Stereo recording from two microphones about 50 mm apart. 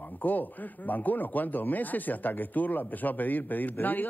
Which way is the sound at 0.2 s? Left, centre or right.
Left.